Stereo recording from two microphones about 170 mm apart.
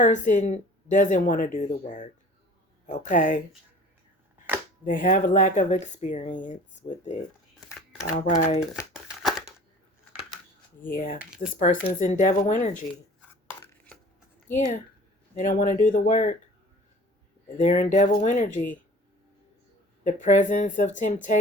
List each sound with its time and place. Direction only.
0.0 s speech: 45° left (ahead or behind)
4.9 s speech: 50° left (ahead or behind)
7.7 s shuffling cards: 15° left (ahead or behind)
8.2 s speech: 40° left (ahead or behind)
9.0 s a sound: centre (ahead or behind)
10.8 s mechanisms: 55° left (ahead or behind)
11.3 s speech: 55° left (ahead or behind)
13.6 s chopping: 10° left (ahead or behind)
14.4 s speech: 15° left (ahead or behind)
15.4 s speech: 45° left (ahead or behind)
17.6 s speech: 50° left (ahead or behind)
20.1 s speech: 45° left (ahead or behind)